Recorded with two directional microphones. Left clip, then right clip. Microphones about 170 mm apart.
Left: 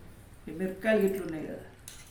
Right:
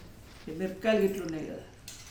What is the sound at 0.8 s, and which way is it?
Speech, 10° left (ahead or behind).